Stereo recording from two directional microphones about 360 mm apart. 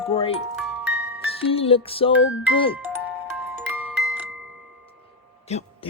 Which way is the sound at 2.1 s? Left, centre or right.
Left.